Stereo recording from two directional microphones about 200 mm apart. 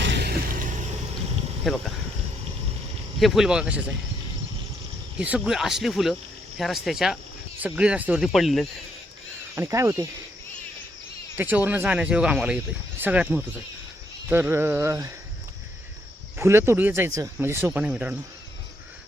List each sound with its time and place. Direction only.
0.0 s a sound: 60° right (ahead or behind); by 0.9 s 40° right (ahead or behind)
1.7 s speech: centre (ahead or behind)
3.2 s speech: centre (ahead or behind)
5.1 s speech: 5° right (ahead or behind)
9.6 s speech: 15° right (ahead or behind)
11.3 s speech: 10° right (ahead or behind)
16.4 s speech: 15° right (ahead or behind)